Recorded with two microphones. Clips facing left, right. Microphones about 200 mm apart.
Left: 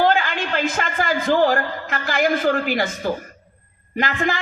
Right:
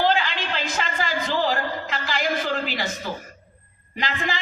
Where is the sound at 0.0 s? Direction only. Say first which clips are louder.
Left 3 dB; 50° left (ahead or behind).